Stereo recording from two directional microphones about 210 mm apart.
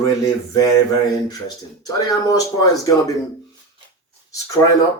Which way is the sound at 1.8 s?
15° left (ahead or behind).